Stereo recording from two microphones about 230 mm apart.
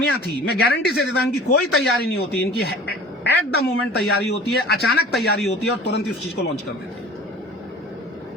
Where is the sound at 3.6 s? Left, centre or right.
Left.